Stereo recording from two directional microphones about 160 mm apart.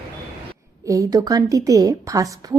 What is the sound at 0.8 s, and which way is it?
A woman's voice, 20° right (ahead or behind).